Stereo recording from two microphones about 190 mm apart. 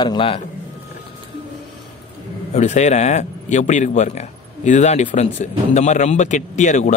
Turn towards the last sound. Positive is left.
turn(degrees=40)  # may be behind; listen again after turning